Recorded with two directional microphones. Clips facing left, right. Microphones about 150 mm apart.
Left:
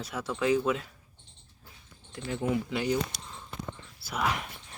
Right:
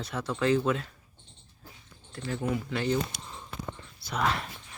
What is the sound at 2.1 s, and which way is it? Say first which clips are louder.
Speech: left 1 dB; 20° left (ahead or behind).